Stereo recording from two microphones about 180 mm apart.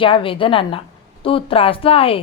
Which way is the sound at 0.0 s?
30° left (ahead or behind).